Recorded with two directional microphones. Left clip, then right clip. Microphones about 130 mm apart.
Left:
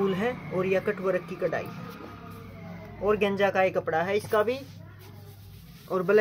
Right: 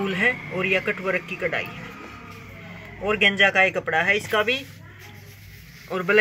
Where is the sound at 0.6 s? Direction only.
25° left (ahead or behind).